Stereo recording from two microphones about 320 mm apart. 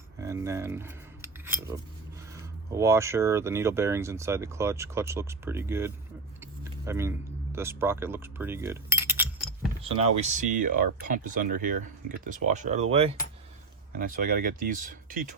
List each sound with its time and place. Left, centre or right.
0.2 s scissors: centre
2.7 s speech: centre
6.4 s vehicle: centre
7.5 s speech: centre
9.8 s speech: centre